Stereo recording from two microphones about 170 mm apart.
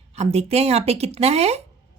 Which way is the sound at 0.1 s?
40° right (ahead or behind).